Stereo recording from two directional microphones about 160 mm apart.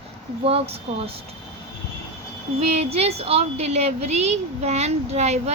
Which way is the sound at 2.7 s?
40° right (ahead or behind).